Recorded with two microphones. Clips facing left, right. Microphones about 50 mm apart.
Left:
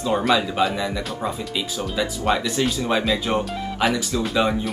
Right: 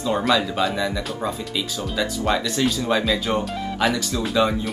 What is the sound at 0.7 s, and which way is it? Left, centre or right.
Speech, centre.